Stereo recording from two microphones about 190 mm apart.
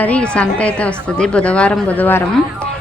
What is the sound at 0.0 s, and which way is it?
Speech, 5° left (ahead or behind).